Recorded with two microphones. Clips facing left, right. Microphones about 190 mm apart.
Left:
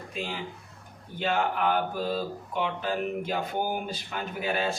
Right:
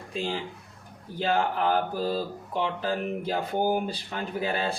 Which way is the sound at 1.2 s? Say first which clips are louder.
Right 1 dB; 35° right (ahead or behind).